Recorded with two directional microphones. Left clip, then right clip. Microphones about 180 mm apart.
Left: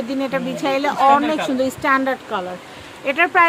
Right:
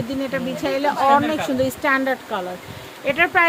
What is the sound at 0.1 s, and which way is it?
Speech, 15° left (ahead or behind).